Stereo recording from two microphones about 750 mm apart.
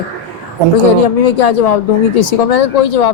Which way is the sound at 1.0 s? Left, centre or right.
Left.